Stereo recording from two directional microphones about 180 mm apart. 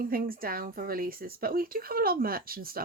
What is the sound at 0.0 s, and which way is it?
Speech, 55° right (ahead or behind).